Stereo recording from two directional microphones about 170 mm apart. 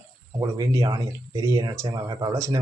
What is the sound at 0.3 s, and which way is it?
Speech, 20° right (ahead or behind).